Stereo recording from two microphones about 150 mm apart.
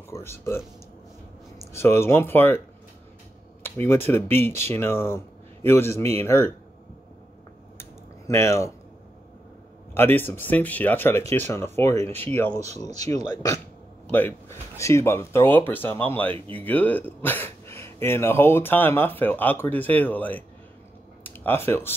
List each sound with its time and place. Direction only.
0.1 s speech: 15° left (ahead or behind)
1.6 s speech: 15° left (ahead or behind)
3.6 s speech: 15° left (ahead or behind)
8.3 s speech: 20° left (ahead or behind)
9.9 s speech: 15° left (ahead or behind)
12.5 s speech: 50° right (ahead or behind)
13.1 s speech: 25° left (ahead or behind)
21.2 s a sound: 15° left (ahead or behind)